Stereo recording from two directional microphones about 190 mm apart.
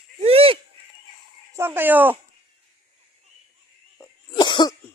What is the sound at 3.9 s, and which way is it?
Cough, 20° left (ahead or behind).